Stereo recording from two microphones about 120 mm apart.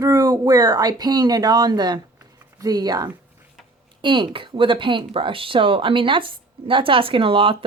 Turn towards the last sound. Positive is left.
turn(degrees=-50)  # may be behind; listen again after turning